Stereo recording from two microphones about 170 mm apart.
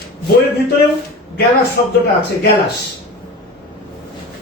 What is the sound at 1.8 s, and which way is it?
Speech, 70° left (ahead or behind).